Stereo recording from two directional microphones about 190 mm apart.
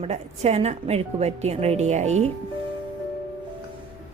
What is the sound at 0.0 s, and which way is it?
A woman's voice, 35° right (ahead or behind).